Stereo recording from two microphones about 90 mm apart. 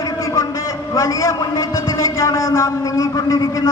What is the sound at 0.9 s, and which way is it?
A man's voice, 35° left (ahead or behind).